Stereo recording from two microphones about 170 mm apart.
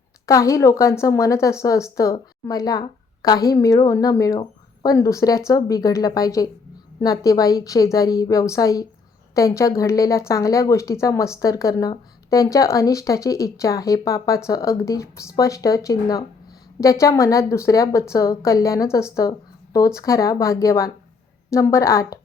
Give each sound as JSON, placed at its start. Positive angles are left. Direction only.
{"t": 0.3, "sound": "a woman's voice", "side_deg": 20}